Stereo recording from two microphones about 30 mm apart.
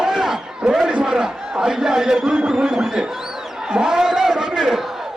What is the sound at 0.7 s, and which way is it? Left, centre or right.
A man's voice, right.